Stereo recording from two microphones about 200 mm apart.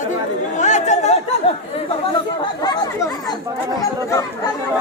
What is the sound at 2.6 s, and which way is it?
Speech, 20° left (ahead or behind).